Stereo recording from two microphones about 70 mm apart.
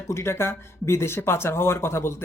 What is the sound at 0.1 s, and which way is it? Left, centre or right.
A man's voice, left.